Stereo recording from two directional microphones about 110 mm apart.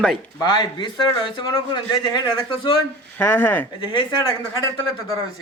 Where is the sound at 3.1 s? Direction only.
15° left (ahead or behind).